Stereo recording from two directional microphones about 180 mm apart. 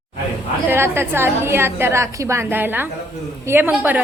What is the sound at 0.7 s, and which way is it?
A woman's voice, 15° right (ahead or behind).